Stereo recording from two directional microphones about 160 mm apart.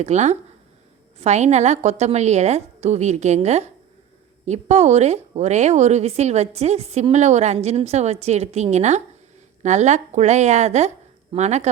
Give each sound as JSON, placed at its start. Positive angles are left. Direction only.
{"t": 0.0, "sound": "a woman's voice", "side_deg": -45}